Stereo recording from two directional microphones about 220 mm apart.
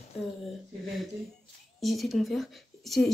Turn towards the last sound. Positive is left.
turn(degrees=0)  # may be behind; listen again after turning